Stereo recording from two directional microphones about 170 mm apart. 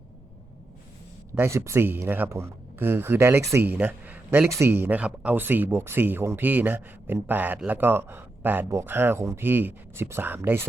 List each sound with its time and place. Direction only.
1.4 s speech: 15° right (ahead or behind)